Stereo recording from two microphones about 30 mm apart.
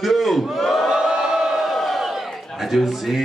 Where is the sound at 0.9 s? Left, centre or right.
Right.